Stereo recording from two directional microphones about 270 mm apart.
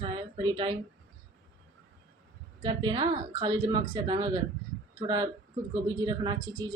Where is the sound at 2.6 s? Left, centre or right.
Centre.